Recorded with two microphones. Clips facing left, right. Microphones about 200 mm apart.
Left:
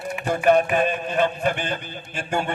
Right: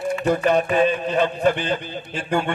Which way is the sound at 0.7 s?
50° left (ahead or behind).